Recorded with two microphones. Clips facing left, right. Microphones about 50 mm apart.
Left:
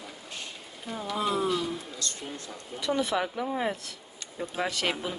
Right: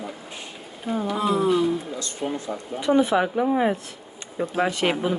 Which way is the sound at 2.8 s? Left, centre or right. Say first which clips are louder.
Right 8 dB; right.